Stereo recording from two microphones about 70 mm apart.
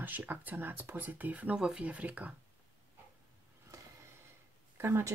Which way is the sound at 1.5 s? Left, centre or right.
Centre.